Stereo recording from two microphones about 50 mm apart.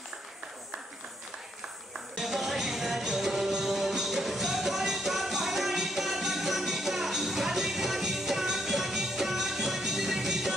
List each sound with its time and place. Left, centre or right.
2.1 s music: centre